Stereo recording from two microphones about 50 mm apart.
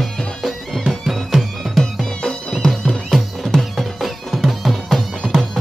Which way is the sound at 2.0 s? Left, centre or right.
Centre.